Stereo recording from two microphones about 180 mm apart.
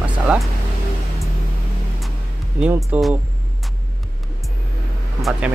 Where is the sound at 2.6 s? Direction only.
5° right (ahead or behind).